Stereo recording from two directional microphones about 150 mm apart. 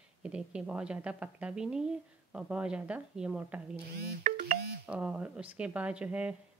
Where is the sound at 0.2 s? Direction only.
5° right (ahead or behind).